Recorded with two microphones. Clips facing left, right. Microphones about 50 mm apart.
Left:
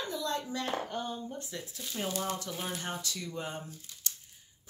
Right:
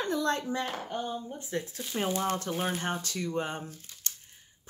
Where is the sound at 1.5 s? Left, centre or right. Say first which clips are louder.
Right 7 dB; right.